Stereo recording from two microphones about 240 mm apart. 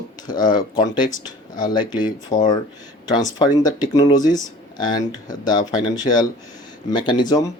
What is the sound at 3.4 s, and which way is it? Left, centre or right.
Speech, centre.